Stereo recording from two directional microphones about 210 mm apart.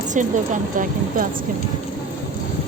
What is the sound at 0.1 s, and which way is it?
A woman's voice, 35° right (ahead or behind).